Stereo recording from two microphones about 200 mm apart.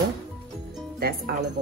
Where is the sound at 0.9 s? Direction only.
50° right (ahead or behind).